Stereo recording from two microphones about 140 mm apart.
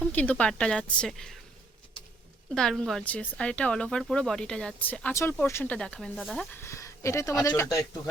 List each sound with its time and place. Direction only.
0.0 s a woman's voice: 10° left (ahead or behind)
2.6 s speech: 5° left (ahead or behind)
6.5 s speech: 20° left (ahead or behind)